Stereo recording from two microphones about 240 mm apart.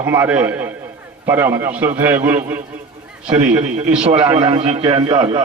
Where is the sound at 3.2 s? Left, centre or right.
Right.